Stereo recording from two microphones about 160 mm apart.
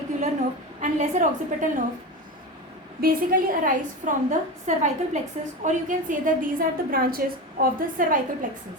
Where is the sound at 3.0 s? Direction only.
65° right (ahead or behind).